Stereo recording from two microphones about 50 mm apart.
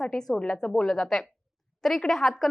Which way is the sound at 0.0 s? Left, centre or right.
Centre.